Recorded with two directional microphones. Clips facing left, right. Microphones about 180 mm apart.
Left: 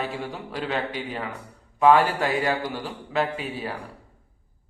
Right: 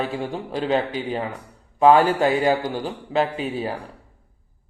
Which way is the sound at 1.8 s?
30° right (ahead or behind).